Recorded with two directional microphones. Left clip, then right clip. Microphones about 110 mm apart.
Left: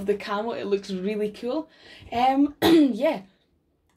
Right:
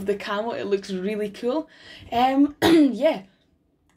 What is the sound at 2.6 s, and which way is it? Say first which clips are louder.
Speech: right 2 dB; centre (ahead or behind).